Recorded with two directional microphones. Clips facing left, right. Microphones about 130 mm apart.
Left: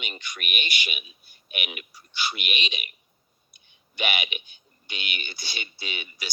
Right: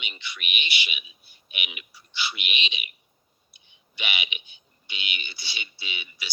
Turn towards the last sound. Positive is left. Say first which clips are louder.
# left 3 dB
turn(degrees=45)  # may be behind; listen again after turning